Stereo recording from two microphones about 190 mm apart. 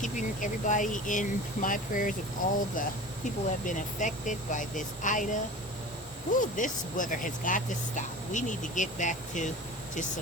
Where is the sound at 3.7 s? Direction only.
40° left (ahead or behind).